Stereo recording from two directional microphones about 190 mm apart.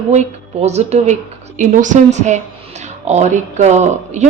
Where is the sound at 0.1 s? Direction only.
35° right (ahead or behind).